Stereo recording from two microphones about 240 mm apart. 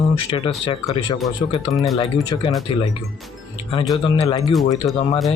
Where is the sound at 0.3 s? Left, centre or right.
Left.